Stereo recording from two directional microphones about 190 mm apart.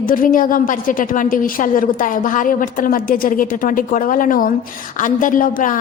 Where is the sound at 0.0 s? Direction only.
45° left (ahead or behind).